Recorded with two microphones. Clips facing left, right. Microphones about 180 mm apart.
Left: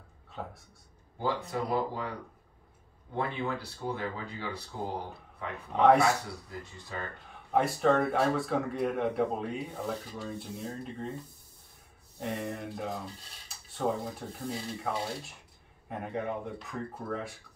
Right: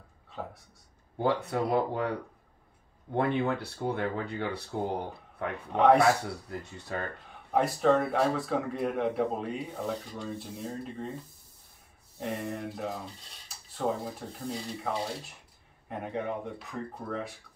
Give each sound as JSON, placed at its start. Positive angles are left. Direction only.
{"t": 0.4, "sound": "a man's voice", "side_deg": 0}
{"t": 1.1, "sound": "speech", "side_deg": -60}
{"t": 3.1, "sound": "speech", "side_deg": -60}
{"t": 5.7, "sound": "a man's voice", "side_deg": 0}
{"t": 6.6, "sound": "speech", "side_deg": -60}
{"t": 7.5, "sound": "a man's voice", "side_deg": 0}
{"t": 12.2, "sound": "a man's voice", "side_deg": 0}